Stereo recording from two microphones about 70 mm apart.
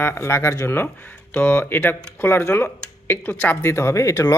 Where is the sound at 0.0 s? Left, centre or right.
Left.